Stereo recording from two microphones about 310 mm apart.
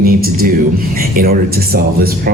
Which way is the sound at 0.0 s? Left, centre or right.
Right.